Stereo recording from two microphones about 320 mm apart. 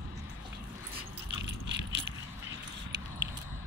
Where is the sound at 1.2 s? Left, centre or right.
Right.